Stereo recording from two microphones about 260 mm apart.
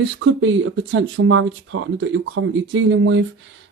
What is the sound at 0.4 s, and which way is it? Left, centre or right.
Speech, right.